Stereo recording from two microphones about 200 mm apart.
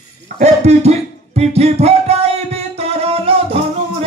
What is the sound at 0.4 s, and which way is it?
Music, 35° right (ahead or behind).